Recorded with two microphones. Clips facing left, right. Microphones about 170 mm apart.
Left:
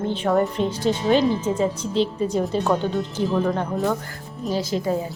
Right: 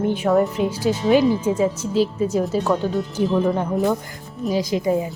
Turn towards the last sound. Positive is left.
turn(degrees=-10)  # may be behind; listen again after turning